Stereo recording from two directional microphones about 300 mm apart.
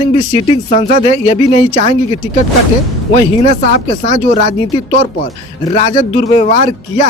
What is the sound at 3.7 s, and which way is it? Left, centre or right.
Speech, left.